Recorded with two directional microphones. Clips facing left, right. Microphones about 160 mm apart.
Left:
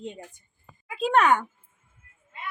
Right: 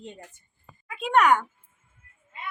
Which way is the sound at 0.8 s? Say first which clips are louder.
Even; 30° left (ahead or behind).